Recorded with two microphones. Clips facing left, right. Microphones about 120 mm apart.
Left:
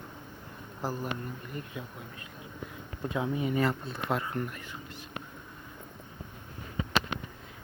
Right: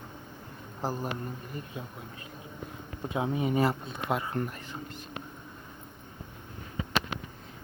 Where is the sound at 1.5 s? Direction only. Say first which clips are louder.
Even; 30° right (ahead or behind).